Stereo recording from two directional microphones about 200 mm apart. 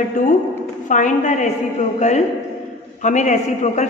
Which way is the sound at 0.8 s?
40° left (ahead or behind).